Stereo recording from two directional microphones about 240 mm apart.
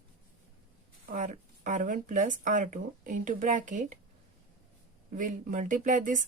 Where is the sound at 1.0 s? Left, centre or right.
Right.